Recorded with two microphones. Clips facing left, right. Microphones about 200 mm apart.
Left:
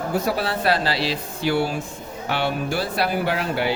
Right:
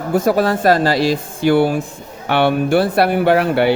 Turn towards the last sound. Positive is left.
turn(degrees=-60)  # may be behind; listen again after turning